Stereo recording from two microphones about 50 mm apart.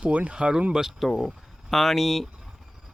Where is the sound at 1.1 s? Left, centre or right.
Centre.